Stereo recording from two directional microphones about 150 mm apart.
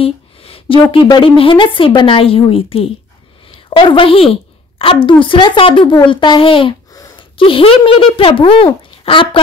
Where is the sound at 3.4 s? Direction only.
35° left (ahead or behind).